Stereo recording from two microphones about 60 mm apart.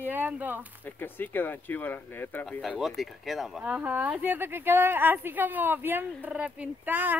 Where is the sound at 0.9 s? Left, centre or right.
Left.